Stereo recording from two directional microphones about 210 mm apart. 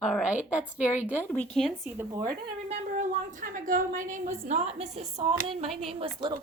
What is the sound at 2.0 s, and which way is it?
Speech, 15° right (ahead or behind).